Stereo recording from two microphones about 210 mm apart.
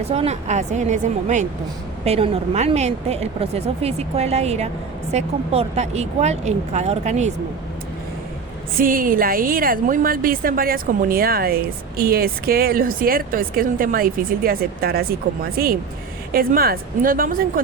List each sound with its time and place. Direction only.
0.0 s speech: 30° right (ahead or behind)
8.8 s a woman's voice: 40° right (ahead or behind)